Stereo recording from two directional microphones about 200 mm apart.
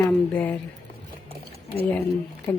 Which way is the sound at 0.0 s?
10° left (ahead or behind).